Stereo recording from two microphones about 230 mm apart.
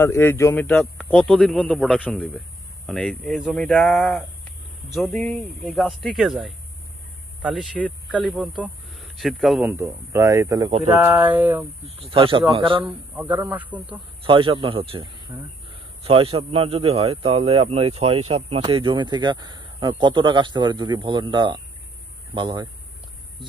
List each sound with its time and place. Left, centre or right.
0.0 s a man's voice: centre
9.0 s speech: centre
12.0 s speech: right
13.1 s speech: centre
13.9 s speech: right
15.3 s speech: centre
16.0 s speech: right